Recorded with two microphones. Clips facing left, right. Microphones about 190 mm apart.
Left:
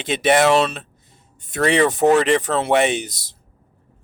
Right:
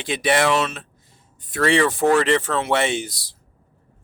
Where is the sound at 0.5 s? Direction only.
35° left (ahead or behind).